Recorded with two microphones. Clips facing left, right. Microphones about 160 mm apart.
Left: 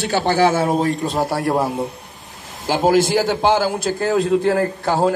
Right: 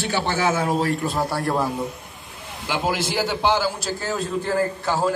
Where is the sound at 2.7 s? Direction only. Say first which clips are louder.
Left 9 dB; 45° left (ahead or behind).